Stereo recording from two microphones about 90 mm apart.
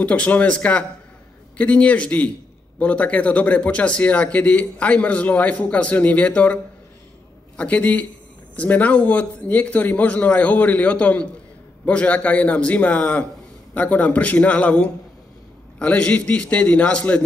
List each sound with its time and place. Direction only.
0.0 s speech: 15° left (ahead or behind)